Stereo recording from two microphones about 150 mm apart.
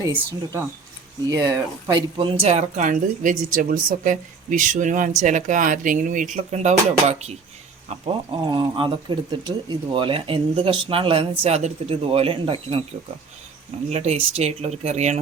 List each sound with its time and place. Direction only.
0.0 s speech: 20° right (ahead or behind); by 2.5 s 35° right (ahead or behind)
2.5 s a woman's voice: 55° right (ahead or behind)
7.9 s speech: 30° right (ahead or behind)
13.9 s speech: 45° right (ahead or behind)